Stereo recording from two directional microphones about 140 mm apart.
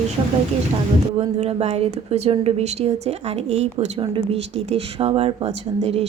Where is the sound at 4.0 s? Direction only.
35° right (ahead or behind).